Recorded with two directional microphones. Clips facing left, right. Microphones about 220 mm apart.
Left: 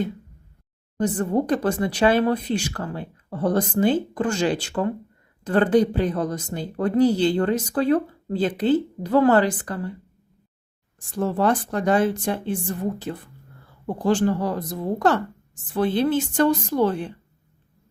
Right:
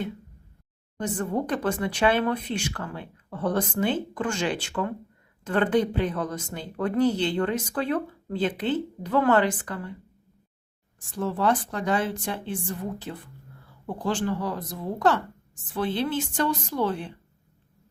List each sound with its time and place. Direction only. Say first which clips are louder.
0.9 s speech: left 6 dB; 35° left (ahead or behind)
11.2 s speech: left 3 dB; 45° left (ahead or behind)